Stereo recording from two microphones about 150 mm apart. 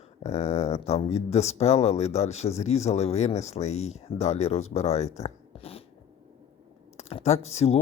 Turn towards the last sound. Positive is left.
turn(degrees=45)  # may be behind; listen again after turning